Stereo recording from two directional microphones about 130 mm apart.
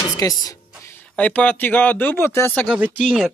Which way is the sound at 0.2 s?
30° left (ahead or behind).